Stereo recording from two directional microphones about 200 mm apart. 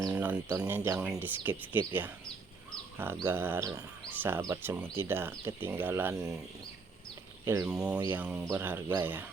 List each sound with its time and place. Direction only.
0.1 s a sound: 5° right (ahead or behind)
0.6 s speech: 10° right (ahead or behind)
3.2 s speech: 10° right (ahead or behind)
7.4 s speech: 15° right (ahead or behind)
7.7 s speech: 5° right (ahead or behind)